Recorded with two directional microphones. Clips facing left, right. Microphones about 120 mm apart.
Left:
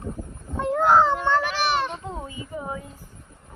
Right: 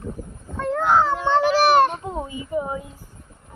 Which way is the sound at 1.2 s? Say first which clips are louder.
Right 4 dB; 25° right (ahead or behind).